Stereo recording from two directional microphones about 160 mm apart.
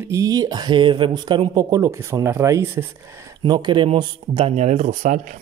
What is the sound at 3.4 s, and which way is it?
Speech, 30° right (ahead or behind).